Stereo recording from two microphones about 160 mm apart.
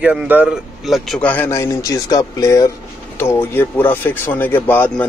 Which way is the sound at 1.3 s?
15° left (ahead or behind).